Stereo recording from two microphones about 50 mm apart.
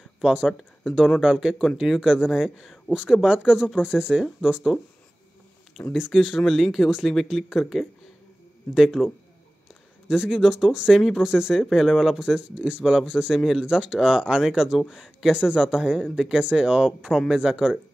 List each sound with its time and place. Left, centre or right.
0.2 s speech: centre
3.0 s speech: centre
5.9 s speech: centre
11.0 s speech: centre
11.2 s speech: centre
12.4 s speech: centre
13.3 s speech: centre
13.6 s speech: centre